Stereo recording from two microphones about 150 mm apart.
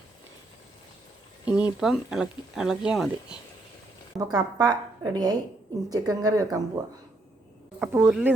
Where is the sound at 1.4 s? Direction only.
5° right (ahead or behind).